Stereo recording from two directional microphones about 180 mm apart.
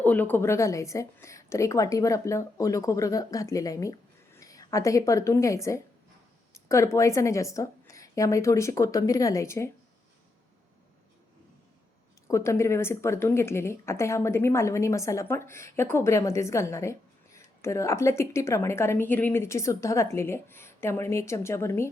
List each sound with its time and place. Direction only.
0.0 s a woman's voice: 10° left (ahead or behind)
12.3 s a woman's voice: 15° left (ahead or behind)